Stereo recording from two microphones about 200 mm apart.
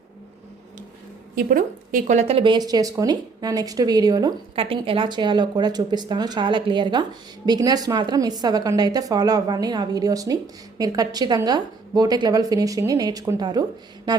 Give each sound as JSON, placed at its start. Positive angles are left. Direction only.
{"t": 1.5, "sound": "speech", "side_deg": -45}